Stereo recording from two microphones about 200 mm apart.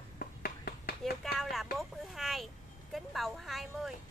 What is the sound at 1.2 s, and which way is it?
Vehicle, centre (ahead or behind).